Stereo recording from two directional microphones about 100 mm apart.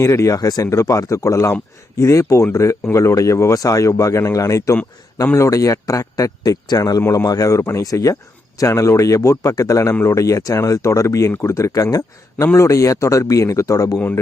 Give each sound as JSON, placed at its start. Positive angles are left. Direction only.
{"t": 0.0, "sound": "speech", "side_deg": 30}